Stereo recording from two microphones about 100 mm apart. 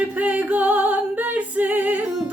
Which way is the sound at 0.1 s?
15° right (ahead or behind).